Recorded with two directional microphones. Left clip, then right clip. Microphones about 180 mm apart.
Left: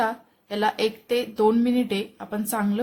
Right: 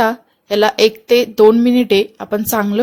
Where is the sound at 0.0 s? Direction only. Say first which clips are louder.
Right 10 dB; 40° right (ahead or behind).